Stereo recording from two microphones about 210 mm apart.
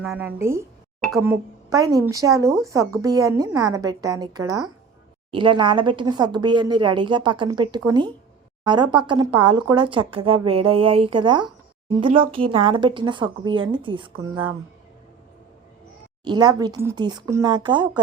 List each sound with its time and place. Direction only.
0.0 s a woman's voice: 10° right (ahead or behind); by 14.5 s 25° right (ahead or behind)
16.2 s speech: 20° right (ahead or behind)